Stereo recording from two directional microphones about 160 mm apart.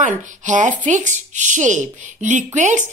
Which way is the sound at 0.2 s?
50° right (ahead or behind).